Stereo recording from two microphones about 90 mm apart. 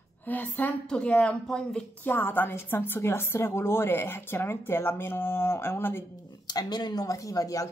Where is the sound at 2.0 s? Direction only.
20° left (ahead or behind).